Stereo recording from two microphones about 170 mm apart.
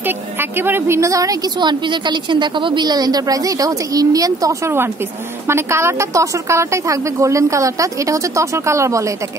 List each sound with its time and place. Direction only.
0.0 s a woman's voice: 15° right (ahead or behind)